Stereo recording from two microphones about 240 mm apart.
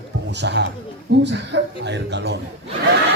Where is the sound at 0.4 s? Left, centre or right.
Right.